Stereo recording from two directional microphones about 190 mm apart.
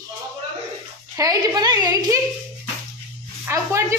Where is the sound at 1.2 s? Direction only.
20° right (ahead or behind).